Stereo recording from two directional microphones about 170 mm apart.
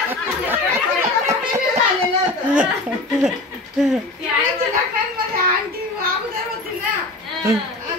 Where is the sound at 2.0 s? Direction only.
5° right (ahead or behind).